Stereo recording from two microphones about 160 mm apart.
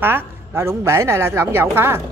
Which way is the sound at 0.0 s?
15° right (ahead or behind).